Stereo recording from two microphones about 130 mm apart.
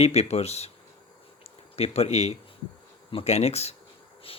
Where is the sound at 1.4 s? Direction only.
55° left (ahead or behind).